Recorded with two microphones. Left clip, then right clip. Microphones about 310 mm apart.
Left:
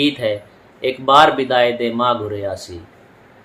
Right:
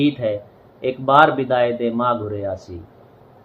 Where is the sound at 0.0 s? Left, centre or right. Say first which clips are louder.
Left 2 dB; centre.